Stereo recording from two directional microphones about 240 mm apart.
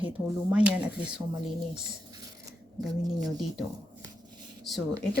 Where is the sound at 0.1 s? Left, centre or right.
Centre.